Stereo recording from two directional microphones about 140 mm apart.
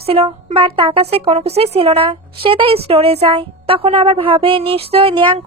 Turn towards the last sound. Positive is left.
turn(degrees=-40)  # may be behind; listen again after turning